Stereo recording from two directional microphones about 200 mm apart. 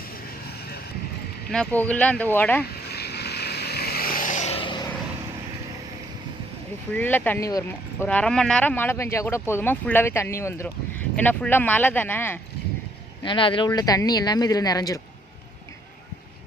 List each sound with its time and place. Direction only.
1.5 s speech: 5° left (ahead or behind)
2.7 s vehicle: 55° left (ahead or behind); by 4.9 s 25° left (ahead or behind)
6.9 s speech: 10° left (ahead or behind)
8.0 s speech: 5° left (ahead or behind)
13.2 s speech: 25° left (ahead or behind)